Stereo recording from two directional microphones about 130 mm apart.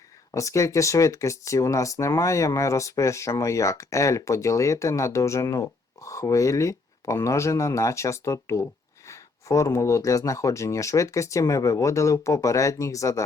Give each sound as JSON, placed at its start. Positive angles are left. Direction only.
{"t": 0.3, "sound": "speech", "side_deg": 25}